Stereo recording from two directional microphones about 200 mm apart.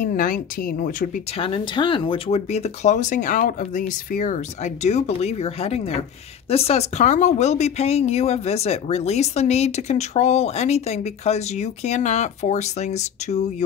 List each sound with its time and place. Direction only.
0.0 s speech: 45° left (ahead or behind)
1.4 s speech: 25° left (ahead or behind)